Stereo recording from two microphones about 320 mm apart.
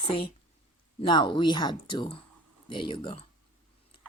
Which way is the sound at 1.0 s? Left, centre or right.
Centre.